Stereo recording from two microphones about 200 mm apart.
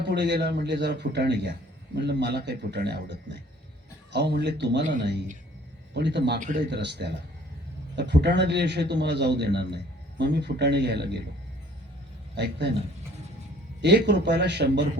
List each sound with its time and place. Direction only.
0.0 s a man's voice: 55° right (ahead or behind)
5.9 s a man's voice: 60° right (ahead or behind)
12.4 s a man's voice: 60° right (ahead or behind)
13.8 s a man's voice: 55° right (ahead or behind)